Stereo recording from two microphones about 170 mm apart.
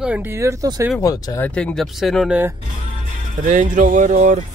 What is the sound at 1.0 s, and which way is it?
Speech, 20° left (ahead or behind).